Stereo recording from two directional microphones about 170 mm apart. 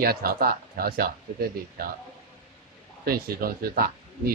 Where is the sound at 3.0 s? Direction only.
60° right (ahead or behind).